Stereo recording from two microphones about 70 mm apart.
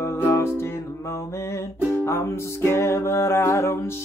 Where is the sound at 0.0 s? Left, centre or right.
Left.